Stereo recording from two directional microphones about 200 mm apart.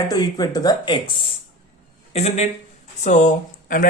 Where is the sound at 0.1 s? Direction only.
20° left (ahead or behind).